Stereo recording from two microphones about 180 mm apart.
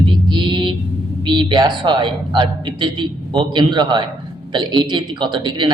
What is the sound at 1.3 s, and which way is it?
A woman's voice, 25° right (ahead or behind).